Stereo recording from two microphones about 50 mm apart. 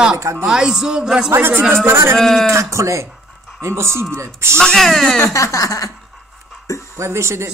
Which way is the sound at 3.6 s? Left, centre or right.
Right.